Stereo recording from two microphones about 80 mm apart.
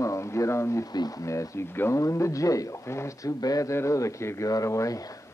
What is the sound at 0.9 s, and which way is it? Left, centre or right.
Speech, left.